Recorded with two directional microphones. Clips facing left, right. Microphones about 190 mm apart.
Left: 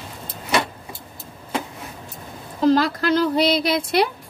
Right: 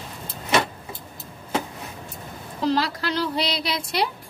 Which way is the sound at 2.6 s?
50° left (ahead or behind).